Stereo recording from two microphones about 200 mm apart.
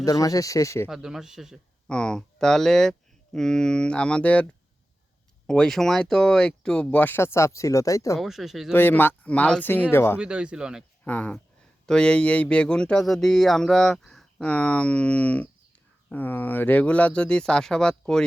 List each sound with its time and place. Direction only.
0.0 s speech: 20° left (ahead or behind)
0.9 s speech: centre (ahead or behind)
5.5 s speech: 5° left (ahead or behind)
8.2 s speech: centre (ahead or behind)
8.7 s speech: 10° left (ahead or behind)
10.2 s speech: 5° right (ahead or behind)
11.0 s speech: 5° left (ahead or behind)